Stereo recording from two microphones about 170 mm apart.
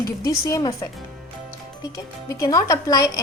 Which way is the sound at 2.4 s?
20° left (ahead or behind).